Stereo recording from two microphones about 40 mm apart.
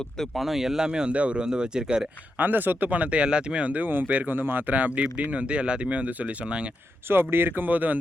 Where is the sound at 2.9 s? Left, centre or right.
Right.